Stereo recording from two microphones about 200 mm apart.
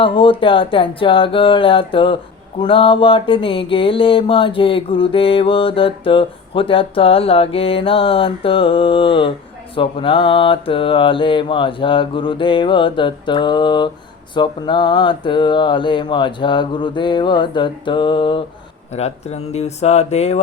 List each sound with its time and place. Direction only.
0.0 s mantra: 25° left (ahead or behind)
18.9 s speech: 35° left (ahead or behind)